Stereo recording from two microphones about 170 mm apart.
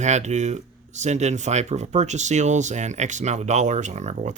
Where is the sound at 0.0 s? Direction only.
40° right (ahead or behind).